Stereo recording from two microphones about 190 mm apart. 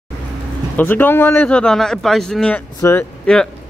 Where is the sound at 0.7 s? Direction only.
10° left (ahead or behind).